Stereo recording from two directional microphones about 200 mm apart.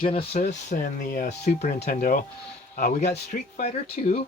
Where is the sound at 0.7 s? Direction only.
45° left (ahead or behind).